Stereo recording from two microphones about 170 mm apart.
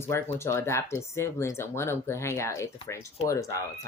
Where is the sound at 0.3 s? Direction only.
15° left (ahead or behind).